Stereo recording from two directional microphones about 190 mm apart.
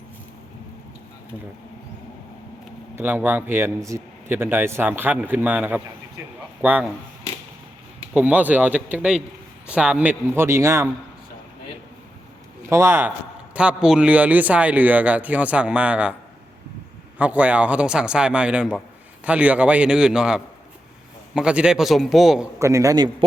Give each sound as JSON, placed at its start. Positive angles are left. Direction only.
{"t": 2.9, "sound": "a man's voice", "side_deg": -10}
{"t": 8.1, "sound": "a man's voice", "side_deg": -10}
{"t": 12.6, "sound": "a man's voice", "side_deg": -15}
{"t": 17.2, "sound": "a man's voice", "side_deg": -5}
{"t": 22.5, "sound": "a man's voice", "side_deg": -15}